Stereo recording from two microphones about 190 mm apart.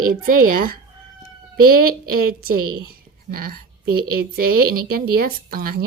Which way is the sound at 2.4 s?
50° right (ahead or behind).